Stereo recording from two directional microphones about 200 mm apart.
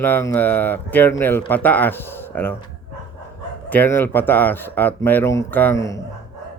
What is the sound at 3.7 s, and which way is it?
Speech, 10° left (ahead or behind).